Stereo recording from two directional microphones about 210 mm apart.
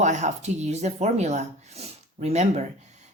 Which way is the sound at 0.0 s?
35° right (ahead or behind).